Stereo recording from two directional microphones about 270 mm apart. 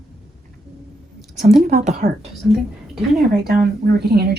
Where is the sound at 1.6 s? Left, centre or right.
Right.